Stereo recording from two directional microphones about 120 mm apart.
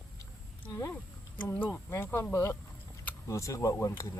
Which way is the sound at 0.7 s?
30° left (ahead or behind).